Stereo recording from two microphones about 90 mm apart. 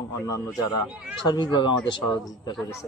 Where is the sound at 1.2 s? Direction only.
55° left (ahead or behind).